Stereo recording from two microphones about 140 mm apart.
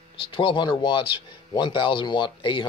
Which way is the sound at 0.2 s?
40° left (ahead or behind).